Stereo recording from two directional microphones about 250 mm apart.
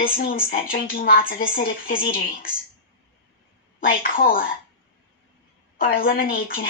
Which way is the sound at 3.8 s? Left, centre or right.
Left.